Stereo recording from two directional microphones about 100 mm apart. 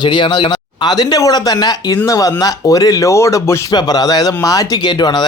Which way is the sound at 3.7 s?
40° left (ahead or behind).